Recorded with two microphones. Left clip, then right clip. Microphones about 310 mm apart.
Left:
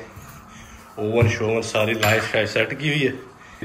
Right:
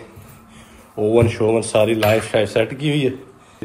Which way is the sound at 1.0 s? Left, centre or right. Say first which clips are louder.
Right 5 dB; centre.